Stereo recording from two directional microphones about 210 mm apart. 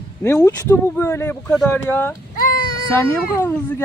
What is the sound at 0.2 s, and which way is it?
Speech, 10° left (ahead or behind).